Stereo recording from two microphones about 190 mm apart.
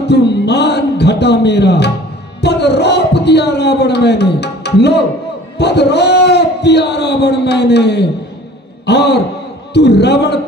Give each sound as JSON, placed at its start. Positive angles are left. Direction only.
{"t": 0.0, "sound": "a man's voice", "side_deg": 60}